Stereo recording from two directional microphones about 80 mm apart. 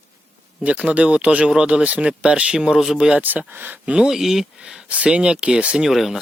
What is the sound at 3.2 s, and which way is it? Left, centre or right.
Speech, right.